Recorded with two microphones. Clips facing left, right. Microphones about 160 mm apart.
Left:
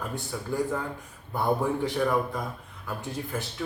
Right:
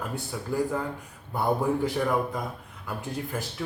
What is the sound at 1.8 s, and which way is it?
Speech, 10° right (ahead or behind).